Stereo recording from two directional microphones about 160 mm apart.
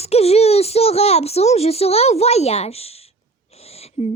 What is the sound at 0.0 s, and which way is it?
A woman's voice, 40° left (ahead or behind).